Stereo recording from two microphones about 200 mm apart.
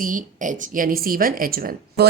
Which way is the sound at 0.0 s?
40° right (ahead or behind).